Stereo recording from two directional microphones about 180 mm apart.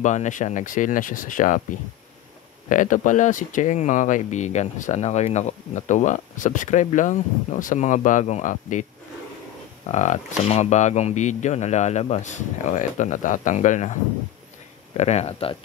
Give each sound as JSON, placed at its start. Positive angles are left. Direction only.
{"t": 0.0, "sound": "speech", "side_deg": 40}
{"t": 2.7, "sound": "speech", "side_deg": 45}
{"t": 9.8, "sound": "speech", "side_deg": 40}
{"t": 15.0, "sound": "speech", "side_deg": 35}